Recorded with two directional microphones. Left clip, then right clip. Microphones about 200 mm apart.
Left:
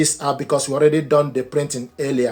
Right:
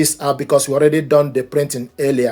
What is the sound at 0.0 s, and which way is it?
Speech, 40° right (ahead or behind).